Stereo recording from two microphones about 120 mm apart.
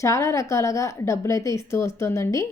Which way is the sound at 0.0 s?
25° left (ahead or behind).